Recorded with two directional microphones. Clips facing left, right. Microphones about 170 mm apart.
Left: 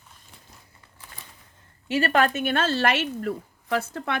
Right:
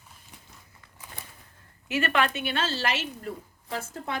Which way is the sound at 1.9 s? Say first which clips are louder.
Left 4 dB; 40° left (ahead or behind).